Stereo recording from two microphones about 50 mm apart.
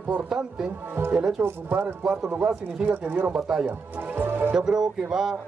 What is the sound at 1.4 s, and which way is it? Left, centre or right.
Speech, right.